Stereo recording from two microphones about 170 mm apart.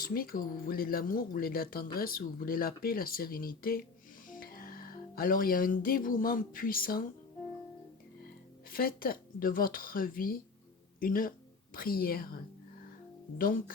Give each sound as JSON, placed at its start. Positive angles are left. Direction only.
{"t": 0.0, "sound": "speech", "side_deg": 60}
{"t": 8.7, "sound": "a woman's voice", "side_deg": 60}
{"t": 13.4, "sound": "speech", "side_deg": 55}